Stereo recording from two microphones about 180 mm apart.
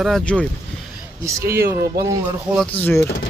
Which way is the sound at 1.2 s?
15° right (ahead or behind).